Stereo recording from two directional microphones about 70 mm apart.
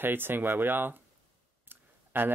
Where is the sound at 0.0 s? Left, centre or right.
Right.